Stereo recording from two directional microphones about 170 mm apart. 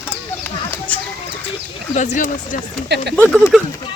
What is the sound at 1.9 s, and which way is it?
Speech, 50° left (ahead or behind).